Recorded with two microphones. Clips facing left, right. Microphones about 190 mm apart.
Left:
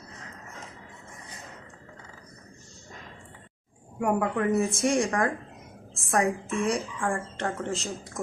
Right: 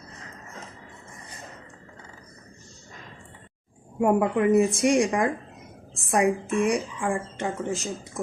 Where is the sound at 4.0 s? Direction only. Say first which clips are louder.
Right 4 dB; 20° right (ahead or behind).